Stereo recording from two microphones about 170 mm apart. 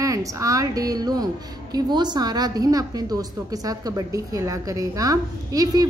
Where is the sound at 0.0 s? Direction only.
20° right (ahead or behind).